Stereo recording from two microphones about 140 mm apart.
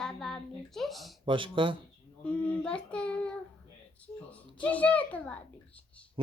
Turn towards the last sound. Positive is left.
turn(degrees=10)  # may be behind; listen again after turning